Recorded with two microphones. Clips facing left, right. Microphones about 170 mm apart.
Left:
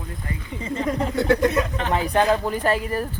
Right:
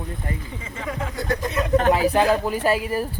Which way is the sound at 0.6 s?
35° left (ahead or behind).